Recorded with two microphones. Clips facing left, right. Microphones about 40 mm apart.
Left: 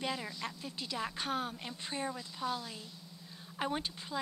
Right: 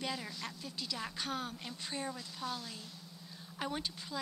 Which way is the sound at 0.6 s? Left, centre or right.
Left.